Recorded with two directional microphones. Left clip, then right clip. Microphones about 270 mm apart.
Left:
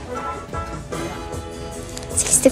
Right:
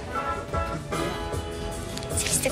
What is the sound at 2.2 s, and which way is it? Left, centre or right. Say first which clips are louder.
Music: left 11 dB; centre.